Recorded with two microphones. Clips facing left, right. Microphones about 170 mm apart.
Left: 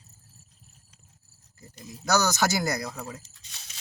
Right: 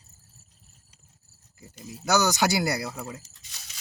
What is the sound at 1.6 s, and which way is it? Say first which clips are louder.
Speech: right 2 dB; 10° right (ahead or behind).